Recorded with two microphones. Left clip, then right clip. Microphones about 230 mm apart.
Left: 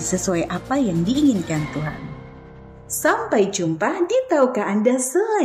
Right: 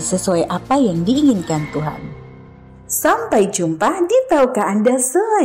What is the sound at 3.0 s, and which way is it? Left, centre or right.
A woman's voice, centre.